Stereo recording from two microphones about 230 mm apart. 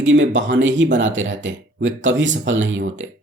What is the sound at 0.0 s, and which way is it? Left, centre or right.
Speech, right.